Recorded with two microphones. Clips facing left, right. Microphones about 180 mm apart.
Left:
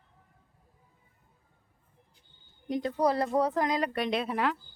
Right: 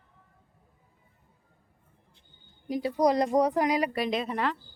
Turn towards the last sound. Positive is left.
turn(degrees=0)  # may be behind; listen again after turning